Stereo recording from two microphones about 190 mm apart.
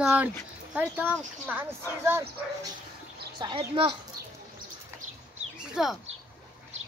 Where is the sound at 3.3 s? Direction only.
25° right (ahead or behind).